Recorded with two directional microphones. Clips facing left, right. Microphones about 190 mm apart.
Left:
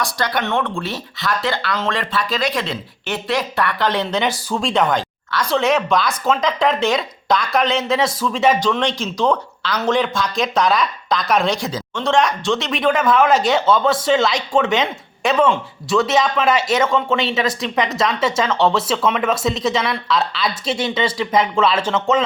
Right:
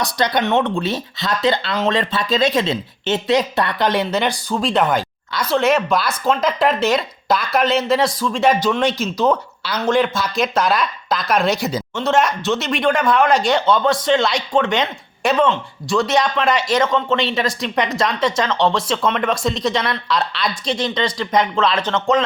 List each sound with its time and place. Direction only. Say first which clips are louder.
0.0 s speech: right 3 dB; 20° right (ahead or behind)
4.1 s speech: right 1 dB; centre (ahead or behind)